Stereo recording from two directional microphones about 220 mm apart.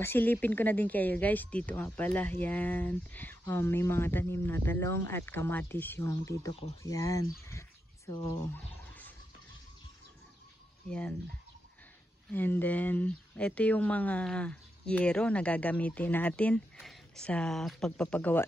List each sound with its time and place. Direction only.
0.0 s speech: 10° left (ahead or behind)
10.9 s speech: 5° left (ahead or behind)
12.3 s speech: 10° left (ahead or behind)